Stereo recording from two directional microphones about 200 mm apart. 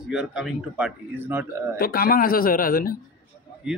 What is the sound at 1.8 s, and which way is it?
Speech, 45° left (ahead or behind).